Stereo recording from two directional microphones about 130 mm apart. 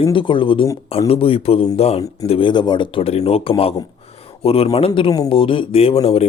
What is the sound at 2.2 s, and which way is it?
Speech, 40° left (ahead or behind).